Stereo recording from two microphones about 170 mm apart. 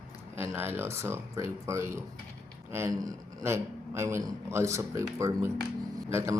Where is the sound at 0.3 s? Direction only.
15° right (ahead or behind).